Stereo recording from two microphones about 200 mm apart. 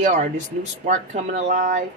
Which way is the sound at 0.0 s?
35° right (ahead or behind).